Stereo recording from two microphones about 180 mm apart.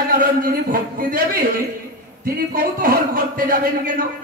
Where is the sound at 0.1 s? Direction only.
55° right (ahead or behind).